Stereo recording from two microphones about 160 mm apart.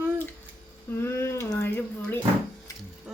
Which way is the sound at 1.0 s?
15° left (ahead or behind).